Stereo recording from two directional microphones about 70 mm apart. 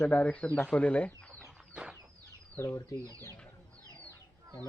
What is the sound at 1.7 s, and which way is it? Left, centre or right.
Chicken, centre.